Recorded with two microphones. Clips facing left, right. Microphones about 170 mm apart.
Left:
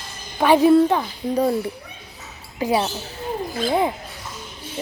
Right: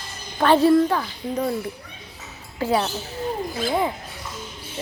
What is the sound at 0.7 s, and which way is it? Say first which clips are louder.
Speech: left 3 dB; 20° left (ahead or behind).